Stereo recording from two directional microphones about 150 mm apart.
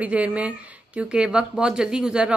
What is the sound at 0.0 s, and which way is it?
A woman's voice, 10° right (ahead or behind).